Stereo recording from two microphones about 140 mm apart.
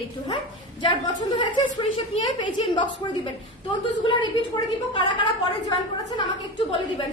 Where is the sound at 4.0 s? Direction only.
35° left (ahead or behind).